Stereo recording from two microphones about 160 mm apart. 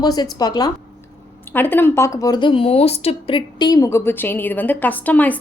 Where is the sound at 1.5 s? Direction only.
10° left (ahead or behind).